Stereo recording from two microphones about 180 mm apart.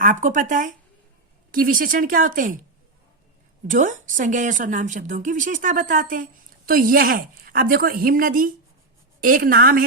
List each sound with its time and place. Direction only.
0.0 s a woman's voice: 45° right (ahead or behind)
3.7 s a woman's voice: 45° right (ahead or behind)